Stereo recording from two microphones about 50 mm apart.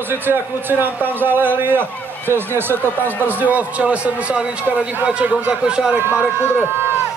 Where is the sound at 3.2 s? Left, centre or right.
Right; by 5.9 s centre.